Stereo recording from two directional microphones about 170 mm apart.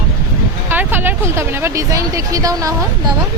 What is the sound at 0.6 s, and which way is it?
Speech, 10° right (ahead or behind).